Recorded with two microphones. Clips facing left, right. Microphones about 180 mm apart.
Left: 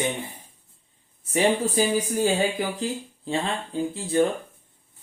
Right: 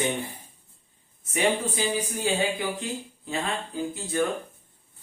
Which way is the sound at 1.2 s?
35° left (ahead or behind).